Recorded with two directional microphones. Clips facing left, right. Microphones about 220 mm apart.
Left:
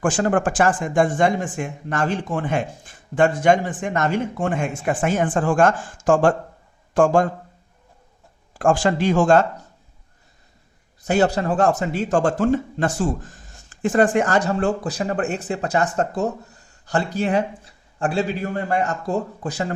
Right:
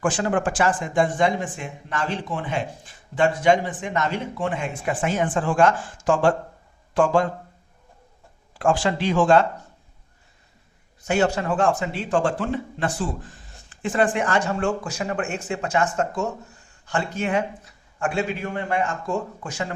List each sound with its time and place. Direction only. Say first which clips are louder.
0.0 s speech: left 3 dB; 45° left (ahead or behind)
8.5 s speech: left 3 dB; 45° left (ahead or behind)
11.0 s a man's voice: left 3 dB; 40° left (ahead or behind)